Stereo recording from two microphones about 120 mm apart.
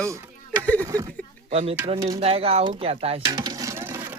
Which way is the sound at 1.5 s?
60° right (ahead or behind).